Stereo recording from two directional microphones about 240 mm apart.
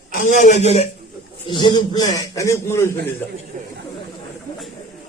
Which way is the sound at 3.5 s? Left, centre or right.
Right.